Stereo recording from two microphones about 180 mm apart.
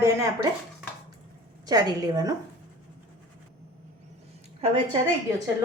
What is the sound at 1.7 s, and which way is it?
Speech, 20° right (ahead or behind).